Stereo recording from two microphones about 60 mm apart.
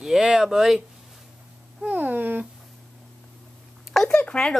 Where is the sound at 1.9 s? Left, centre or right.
Right.